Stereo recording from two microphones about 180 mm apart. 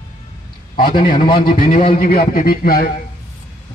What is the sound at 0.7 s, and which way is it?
Speech, 50° left (ahead or behind).